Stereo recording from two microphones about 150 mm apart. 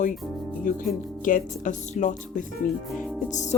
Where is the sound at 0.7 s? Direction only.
65° left (ahead or behind).